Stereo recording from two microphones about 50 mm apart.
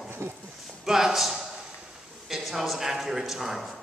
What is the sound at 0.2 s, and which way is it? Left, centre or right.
Speech, right.